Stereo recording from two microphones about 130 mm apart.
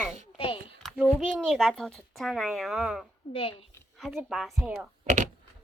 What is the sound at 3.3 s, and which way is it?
Speech, 40° left (ahead or behind).